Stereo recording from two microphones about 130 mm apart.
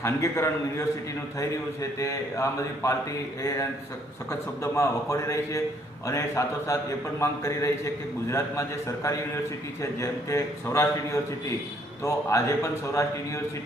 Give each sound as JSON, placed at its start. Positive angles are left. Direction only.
{"t": 0.0, "sound": "a man's voice", "side_deg": 20}